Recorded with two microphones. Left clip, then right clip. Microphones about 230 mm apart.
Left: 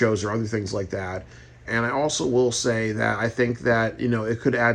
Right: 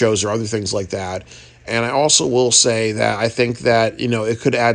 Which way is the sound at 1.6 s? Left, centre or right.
Right.